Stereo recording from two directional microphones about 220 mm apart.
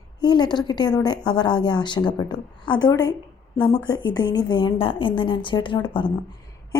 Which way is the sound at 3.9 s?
20° left (ahead or behind).